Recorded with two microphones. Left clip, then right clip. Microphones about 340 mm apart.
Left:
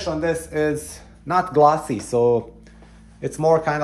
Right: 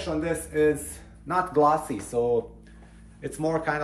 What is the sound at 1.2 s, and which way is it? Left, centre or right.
Speech, left.